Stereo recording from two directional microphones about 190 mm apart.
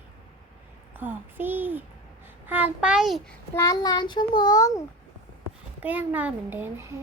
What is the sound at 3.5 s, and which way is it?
A child's voice, 20° left (ahead or behind).